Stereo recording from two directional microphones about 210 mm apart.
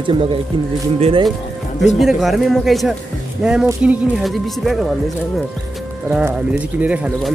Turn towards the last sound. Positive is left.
turn(degrees=-5)  # may be behind; listen again after turning